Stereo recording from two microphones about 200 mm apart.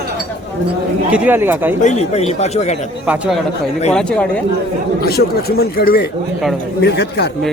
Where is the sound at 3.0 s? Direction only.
5° right (ahead or behind).